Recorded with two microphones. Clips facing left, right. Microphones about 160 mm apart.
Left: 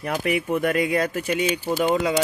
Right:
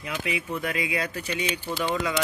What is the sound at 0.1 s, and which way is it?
Speech, 50° left (ahead or behind).